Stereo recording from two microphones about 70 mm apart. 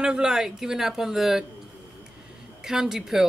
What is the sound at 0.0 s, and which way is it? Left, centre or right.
Speech, centre.